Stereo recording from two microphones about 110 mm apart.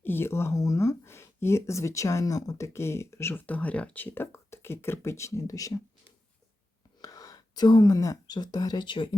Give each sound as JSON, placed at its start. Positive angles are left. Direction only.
{"t": 0.0, "sound": "speech", "side_deg": 20}
{"t": 7.0, "sound": "speech", "side_deg": 35}